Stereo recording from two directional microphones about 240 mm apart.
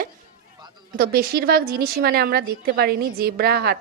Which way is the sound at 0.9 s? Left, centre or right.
Right.